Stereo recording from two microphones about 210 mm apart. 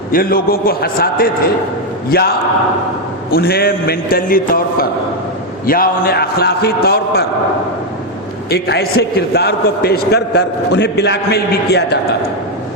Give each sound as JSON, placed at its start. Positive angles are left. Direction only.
{"t": 0.1, "sound": "a man's voice", "side_deg": 45}
{"t": 3.3, "sound": "a man's voice", "side_deg": 45}
{"t": 8.4, "sound": "a man's voice", "side_deg": 50}